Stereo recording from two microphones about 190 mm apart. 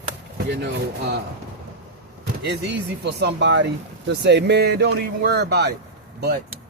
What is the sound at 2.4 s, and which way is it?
Speech, 60° right (ahead or behind).